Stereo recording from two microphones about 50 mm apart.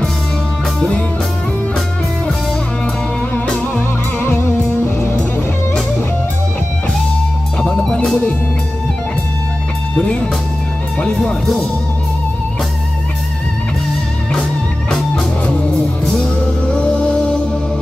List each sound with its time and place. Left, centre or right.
0.7 s music: left
4.2 s music: left
7.8 s music: centre
15.4 s music: left